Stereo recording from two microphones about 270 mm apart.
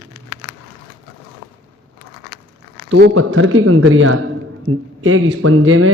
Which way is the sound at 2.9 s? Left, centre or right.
Right.